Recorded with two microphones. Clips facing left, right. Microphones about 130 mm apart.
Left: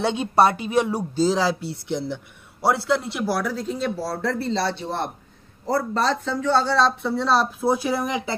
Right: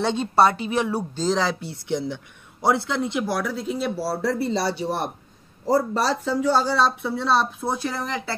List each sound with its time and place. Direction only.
0.0 s speech: 10° left (ahead or behind)